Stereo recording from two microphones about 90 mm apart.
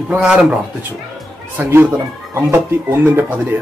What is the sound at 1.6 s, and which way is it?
Speech, 30° right (ahead or behind).